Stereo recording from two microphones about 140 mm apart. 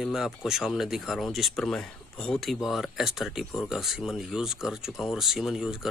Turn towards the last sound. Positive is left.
turn(degrees=-5)  # may be behind; listen again after turning